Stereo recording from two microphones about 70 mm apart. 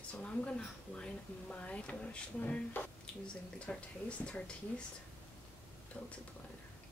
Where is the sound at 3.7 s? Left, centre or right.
Centre.